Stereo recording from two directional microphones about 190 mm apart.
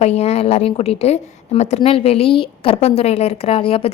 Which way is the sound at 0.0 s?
35° left (ahead or behind).